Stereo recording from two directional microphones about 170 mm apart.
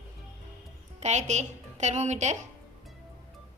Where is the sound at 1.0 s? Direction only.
40° right (ahead or behind).